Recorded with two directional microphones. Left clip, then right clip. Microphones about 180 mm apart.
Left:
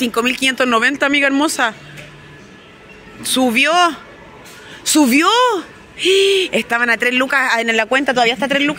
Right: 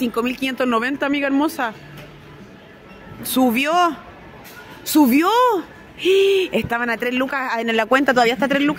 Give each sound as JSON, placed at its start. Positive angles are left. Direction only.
{"t": 0.0, "sound": "speech", "side_deg": 0}
{"t": 3.2, "sound": "speech", "side_deg": -15}
{"t": 7.7, "sound": "speech", "side_deg": -25}